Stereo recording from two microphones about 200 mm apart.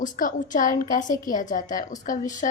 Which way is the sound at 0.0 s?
40° left (ahead or behind).